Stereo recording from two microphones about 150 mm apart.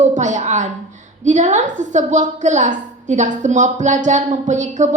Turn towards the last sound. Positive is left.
turn(degrees=-55)  # may be behind; listen again after turning